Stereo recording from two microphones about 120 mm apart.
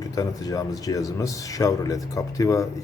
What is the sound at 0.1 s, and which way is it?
A man's voice, 30° left (ahead or behind).